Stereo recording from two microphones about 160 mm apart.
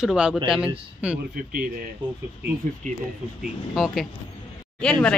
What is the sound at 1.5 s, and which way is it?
Speech, 65° right (ahead or behind).